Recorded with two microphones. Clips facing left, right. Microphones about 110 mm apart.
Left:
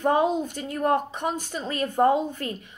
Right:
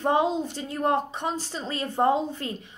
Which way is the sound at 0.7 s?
25° right (ahead or behind).